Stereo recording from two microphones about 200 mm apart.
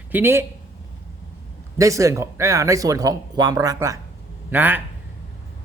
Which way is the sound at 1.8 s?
15° right (ahead or behind).